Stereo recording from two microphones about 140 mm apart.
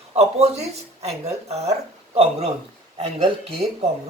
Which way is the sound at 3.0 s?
50° right (ahead or behind).